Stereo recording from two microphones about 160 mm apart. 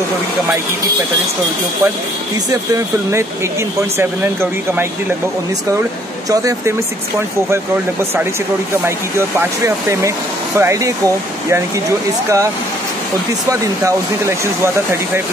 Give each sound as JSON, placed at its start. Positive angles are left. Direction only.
{"t": 2.7, "sound": "speech", "side_deg": -20}
{"t": 10.6, "sound": "speech", "side_deg": -20}
{"t": 13.5, "sound": "speech", "side_deg": -20}